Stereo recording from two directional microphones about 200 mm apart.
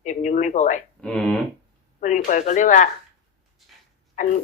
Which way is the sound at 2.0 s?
40° left (ahead or behind).